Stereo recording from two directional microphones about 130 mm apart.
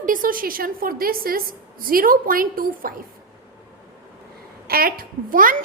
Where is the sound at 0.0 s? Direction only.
90° right.